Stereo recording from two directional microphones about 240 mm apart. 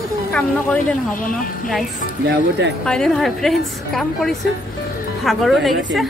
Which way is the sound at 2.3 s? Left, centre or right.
Right.